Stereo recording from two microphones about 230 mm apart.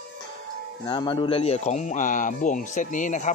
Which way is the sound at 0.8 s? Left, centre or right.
Centre.